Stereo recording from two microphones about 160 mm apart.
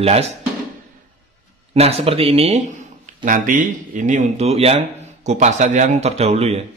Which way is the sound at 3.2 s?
55° right (ahead or behind).